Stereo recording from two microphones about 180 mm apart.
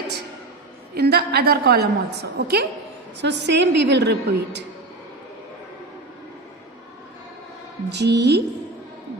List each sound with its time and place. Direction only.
0.9 s a woman's voice: 65° right (ahead or behind)
3.2 s a woman's voice: 75° right (ahead or behind)
7.9 s a woman's voice: 70° right (ahead or behind)